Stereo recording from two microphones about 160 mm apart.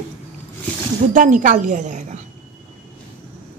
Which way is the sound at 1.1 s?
55° right (ahead or behind).